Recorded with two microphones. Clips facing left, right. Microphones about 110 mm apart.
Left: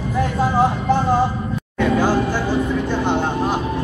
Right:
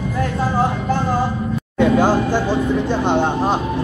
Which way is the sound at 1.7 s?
25° right (ahead or behind).